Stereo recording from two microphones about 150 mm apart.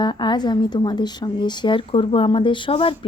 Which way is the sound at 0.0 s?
30° left (ahead or behind).